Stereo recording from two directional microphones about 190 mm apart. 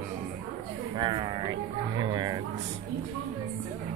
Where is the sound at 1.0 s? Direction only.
25° right (ahead or behind).